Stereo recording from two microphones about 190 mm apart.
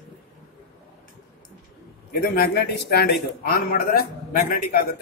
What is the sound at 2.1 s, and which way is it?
A man's voice, 55° left (ahead or behind).